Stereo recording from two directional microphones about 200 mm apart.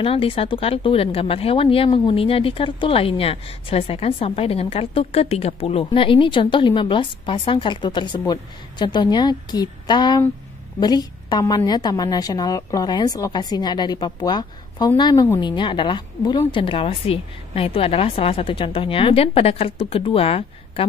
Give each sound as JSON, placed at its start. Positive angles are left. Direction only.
{"t": 0.0, "sound": "speech", "side_deg": 25}